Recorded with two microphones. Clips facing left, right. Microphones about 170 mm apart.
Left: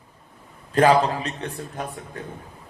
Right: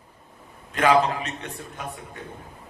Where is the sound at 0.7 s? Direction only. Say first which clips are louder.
Left 2 dB; 35° left (ahead or behind).